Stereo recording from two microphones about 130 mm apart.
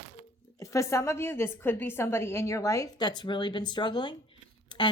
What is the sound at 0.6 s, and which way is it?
A woman's voice, 25° left (ahead or behind).